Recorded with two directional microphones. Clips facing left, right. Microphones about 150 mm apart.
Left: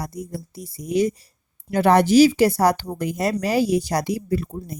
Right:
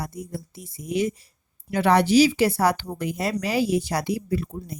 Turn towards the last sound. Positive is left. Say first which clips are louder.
# left 3 dB
turn(degrees=45)  # may be behind; listen again after turning